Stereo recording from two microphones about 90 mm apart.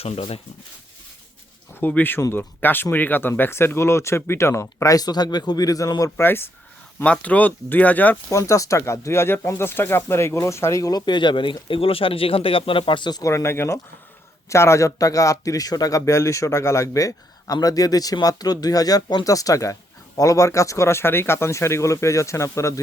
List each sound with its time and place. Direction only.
0.0 s speech: 90° left
1.8 s speech: 20° left (ahead or behind); by 6.2 s 40° left (ahead or behind)
6.2 s speech: 25° left (ahead or behind)
7.0 s speech: 15° left (ahead or behind)
8.3 s speech: 35° left (ahead or behind); by 11.5 s 65° left (ahead or behind)
11.7 s speech: 90° left; by 13.2 s 55° left (ahead or behind)
13.2 s speech: 30° left (ahead or behind)